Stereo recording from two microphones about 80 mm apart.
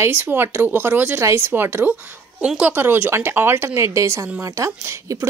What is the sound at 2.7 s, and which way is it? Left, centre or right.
Speech, right.